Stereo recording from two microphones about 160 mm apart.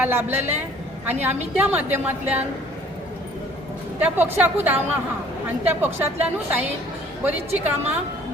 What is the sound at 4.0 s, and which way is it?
Speech, 10° right (ahead or behind).